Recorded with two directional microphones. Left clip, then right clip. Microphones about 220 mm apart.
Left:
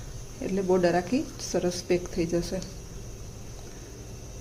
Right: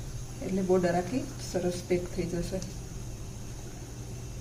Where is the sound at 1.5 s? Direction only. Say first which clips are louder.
Left 3 dB; 40° left (ahead or behind).